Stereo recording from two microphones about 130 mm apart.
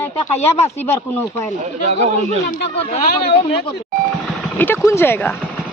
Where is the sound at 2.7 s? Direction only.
50° left (ahead or behind).